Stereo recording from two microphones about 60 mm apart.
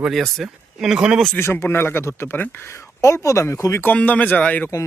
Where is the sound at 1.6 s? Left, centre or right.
Left.